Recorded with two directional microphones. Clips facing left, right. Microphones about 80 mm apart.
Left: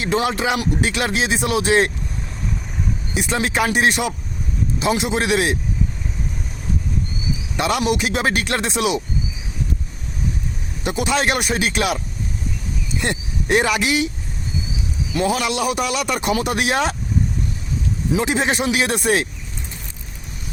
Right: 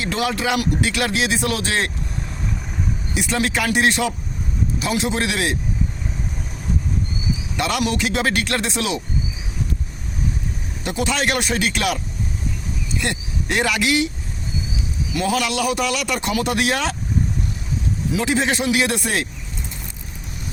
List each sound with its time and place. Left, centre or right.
0.0 s speech: left
3.2 s speech: left
7.5 s speech: left
10.8 s speech: left
15.1 s speech: left
18.1 s speech: left